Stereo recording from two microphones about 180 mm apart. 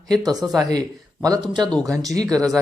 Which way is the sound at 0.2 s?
20° right (ahead or behind).